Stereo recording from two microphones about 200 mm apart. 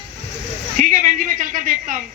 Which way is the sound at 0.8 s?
40° right (ahead or behind).